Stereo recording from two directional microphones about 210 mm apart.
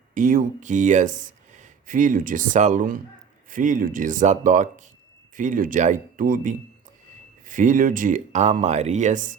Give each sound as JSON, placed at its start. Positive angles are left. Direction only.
{"t": 0.1, "sound": "speech", "side_deg": -40}